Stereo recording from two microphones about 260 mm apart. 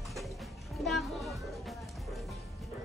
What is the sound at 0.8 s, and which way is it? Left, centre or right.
Music, centre.